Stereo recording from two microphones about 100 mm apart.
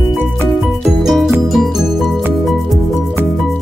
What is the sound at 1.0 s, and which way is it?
Music, centre (ahead or behind).